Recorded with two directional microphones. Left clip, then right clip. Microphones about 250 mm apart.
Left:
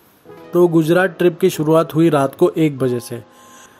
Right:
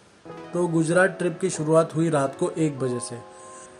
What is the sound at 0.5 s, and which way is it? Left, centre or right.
Speech, left.